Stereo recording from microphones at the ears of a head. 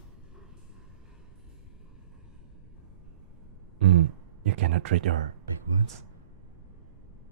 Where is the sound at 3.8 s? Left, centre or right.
Right.